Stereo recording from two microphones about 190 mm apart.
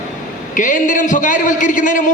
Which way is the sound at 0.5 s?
45° left (ahead or behind).